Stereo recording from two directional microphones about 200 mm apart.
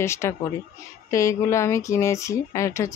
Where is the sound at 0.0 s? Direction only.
15° left (ahead or behind).